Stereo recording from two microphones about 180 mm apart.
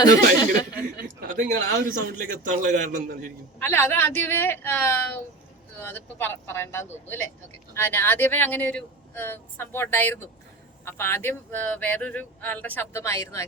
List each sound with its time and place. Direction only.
1.4 s a man's voice: 55° right (ahead or behind)
3.6 s speech: 15° left (ahead or behind)